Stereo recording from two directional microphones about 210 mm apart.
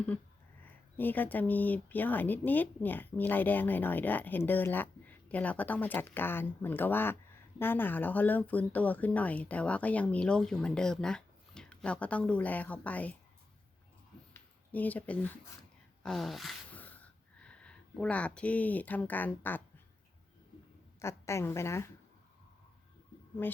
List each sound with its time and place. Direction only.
0.6 s speech: 10° left (ahead or behind)
14.7 s speech: 10° left (ahead or behind)
16.0 s a sound: centre (ahead or behind)
21.0 s speech: 15° left (ahead or behind)